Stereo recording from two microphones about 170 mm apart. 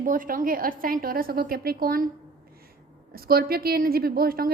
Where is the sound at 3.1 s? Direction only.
65° right (ahead or behind).